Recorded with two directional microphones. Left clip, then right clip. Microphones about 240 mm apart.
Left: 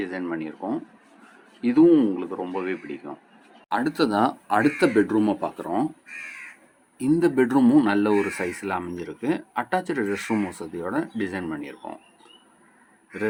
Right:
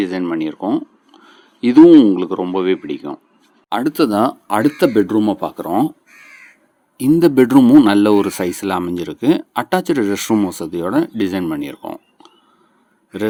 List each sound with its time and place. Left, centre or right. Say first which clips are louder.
0.0 s speech: right 10 dB; right
3.7 s speech: right 7 dB; right
6.9 s speech: right 9 dB; right